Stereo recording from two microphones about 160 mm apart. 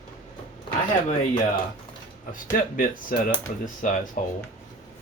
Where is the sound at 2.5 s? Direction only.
60° left (ahead or behind).